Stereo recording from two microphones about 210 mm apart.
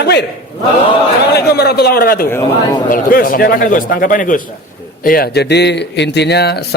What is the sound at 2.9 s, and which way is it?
A man's voice, 40° left (ahead or behind).